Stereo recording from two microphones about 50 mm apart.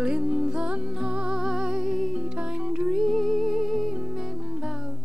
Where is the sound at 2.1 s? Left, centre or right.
Right.